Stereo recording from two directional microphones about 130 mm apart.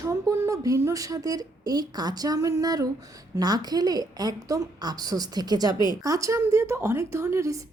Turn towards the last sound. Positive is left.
turn(degrees=-25)  # may be behind; listen again after turning